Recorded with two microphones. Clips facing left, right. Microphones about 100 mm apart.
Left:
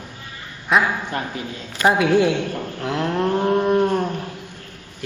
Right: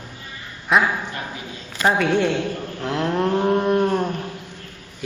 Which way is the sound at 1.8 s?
5° left (ahead or behind).